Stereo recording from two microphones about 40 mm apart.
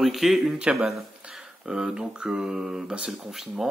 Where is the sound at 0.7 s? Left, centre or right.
Right.